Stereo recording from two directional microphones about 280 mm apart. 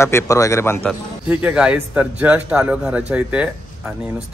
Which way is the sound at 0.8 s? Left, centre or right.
Centre.